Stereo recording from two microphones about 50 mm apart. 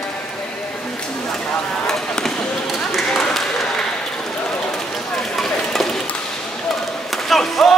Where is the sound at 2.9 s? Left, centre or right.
Centre.